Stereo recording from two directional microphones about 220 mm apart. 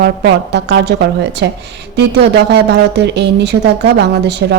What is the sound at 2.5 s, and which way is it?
A woman's voice, 50° right (ahead or behind).